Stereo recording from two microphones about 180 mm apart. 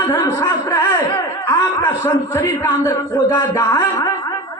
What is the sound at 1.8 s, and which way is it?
A man's voice, 20° left (ahead or behind).